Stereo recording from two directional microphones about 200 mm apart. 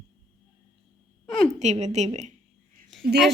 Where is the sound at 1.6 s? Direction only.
35° right (ahead or behind).